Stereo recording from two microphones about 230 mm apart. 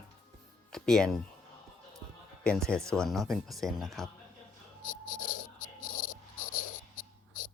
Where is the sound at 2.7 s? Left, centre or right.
Centre.